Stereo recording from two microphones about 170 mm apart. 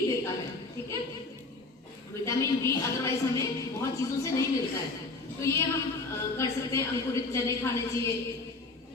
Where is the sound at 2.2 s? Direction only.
15° left (ahead or behind).